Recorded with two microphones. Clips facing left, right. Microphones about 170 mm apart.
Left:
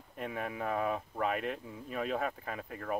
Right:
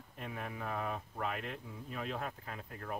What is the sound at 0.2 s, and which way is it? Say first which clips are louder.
Speech: left 6 dB; 65° left (ahead or behind).